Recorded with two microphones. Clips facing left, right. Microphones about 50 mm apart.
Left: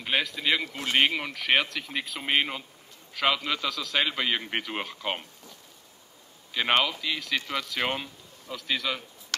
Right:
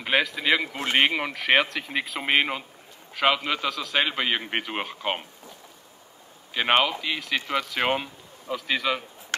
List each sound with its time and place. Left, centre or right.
0.0 s speech: centre
0.7 s speech: right
0.9 s speech: centre
3.2 s speech: right
6.5 s speech: right